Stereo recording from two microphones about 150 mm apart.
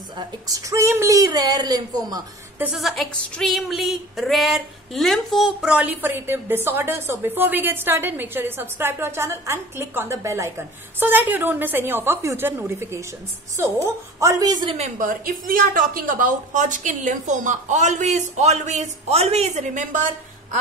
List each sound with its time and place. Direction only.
0.2 s a woman's voice: 20° right (ahead or behind)
2.6 s a sound: 5° right (ahead or behind)
14.2 s a woman's voice: 25° right (ahead or behind)
15.0 s a woman's voice: 65° right (ahead or behind)